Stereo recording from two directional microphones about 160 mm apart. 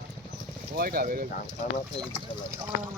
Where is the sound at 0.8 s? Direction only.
65° right (ahead or behind).